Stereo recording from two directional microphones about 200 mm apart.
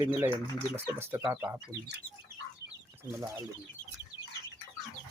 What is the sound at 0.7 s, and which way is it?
Speech, 10° right (ahead or behind).